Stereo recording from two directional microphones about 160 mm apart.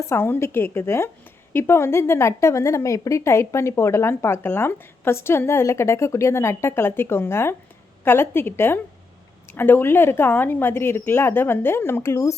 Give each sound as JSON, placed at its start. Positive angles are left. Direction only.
{"t": 0.1, "sound": "a woman's voice", "side_deg": 15}